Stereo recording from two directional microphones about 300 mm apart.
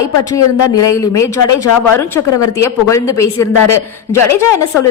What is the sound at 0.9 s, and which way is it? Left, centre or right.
Speech, centre.